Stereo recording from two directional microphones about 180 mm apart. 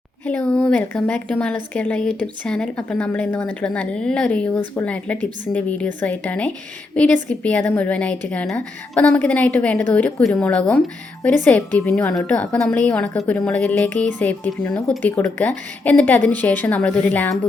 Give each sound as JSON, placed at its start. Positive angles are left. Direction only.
{"t": 0.3, "sound": "a woman's voice", "side_deg": 10}